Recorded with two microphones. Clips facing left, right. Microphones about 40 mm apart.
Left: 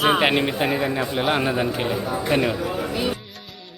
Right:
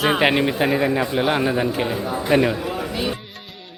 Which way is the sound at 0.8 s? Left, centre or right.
Right.